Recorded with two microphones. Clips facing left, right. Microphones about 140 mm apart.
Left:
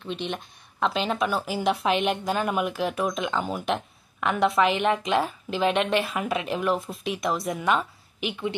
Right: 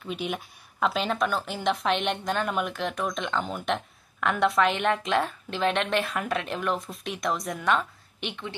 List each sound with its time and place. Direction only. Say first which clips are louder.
0.0 s speech: even; 5° right (ahead or behind)